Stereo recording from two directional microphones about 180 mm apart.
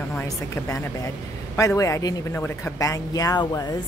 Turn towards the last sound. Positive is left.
turn(degrees=20)  # may be behind; listen again after turning